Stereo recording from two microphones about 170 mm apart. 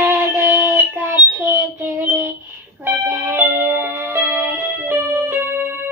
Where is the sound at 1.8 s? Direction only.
15° right (ahead or behind).